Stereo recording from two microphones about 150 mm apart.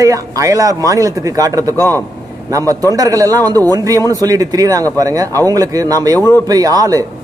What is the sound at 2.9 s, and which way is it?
Speech, 25° right (ahead or behind).